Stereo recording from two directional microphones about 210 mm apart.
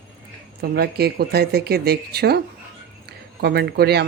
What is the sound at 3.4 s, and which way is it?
Speech, 50° right (ahead or behind).